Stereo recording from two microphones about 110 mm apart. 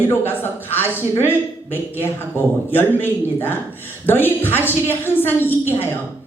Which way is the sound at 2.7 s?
20° left (ahead or behind).